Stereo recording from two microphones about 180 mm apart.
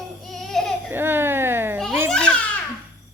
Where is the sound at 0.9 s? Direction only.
10° right (ahead or behind).